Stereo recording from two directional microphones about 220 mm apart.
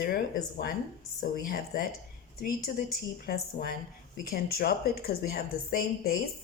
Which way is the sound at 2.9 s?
45° left (ahead or behind).